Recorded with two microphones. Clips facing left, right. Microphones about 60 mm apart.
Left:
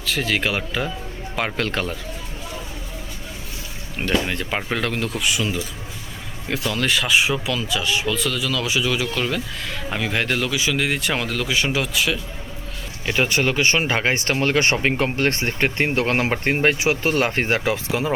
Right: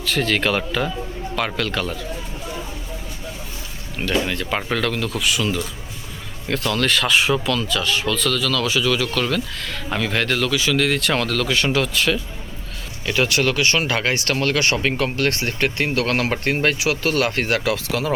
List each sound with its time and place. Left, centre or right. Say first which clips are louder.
0.0 s speech: right 2 dB; centre
1.5 s speech: even; left
3.9 s speech: even; left; by 12.2 s centre
13.2 s speech: even; left